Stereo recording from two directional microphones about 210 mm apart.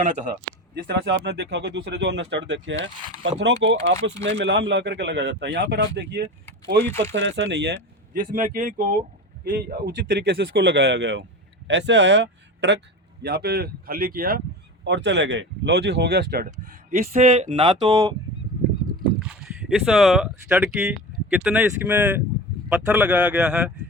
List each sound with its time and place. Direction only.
0.0 s speech: 35° right (ahead or behind)
0.8 s speech: 50° right (ahead or behind)
9.4 s speech: 50° right (ahead or behind)
14.8 s speech: 55° right (ahead or behind)
16.9 s speech: 35° right (ahead or behind)
19.3 s speech: 5° right (ahead or behind)